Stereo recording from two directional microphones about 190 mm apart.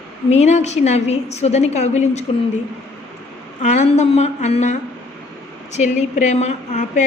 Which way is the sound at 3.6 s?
40° left (ahead or behind).